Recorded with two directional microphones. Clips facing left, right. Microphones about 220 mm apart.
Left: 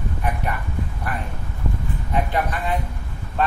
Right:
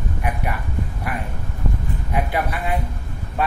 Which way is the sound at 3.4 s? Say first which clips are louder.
Left 1 dB; 10° right (ahead or behind).